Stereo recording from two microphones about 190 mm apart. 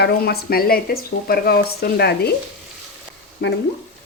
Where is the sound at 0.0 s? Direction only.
55° left (ahead or behind).